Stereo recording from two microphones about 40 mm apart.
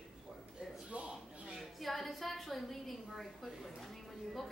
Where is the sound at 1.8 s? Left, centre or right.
Centre.